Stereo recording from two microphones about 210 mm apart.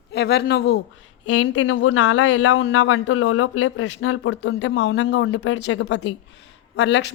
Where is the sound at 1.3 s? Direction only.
80° left.